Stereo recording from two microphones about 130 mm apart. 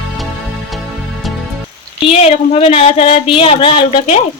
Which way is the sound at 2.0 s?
50° left (ahead or behind).